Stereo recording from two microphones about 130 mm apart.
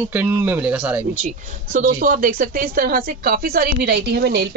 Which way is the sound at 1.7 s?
90° right.